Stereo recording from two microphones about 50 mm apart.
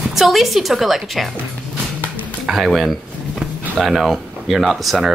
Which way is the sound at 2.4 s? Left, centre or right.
Centre.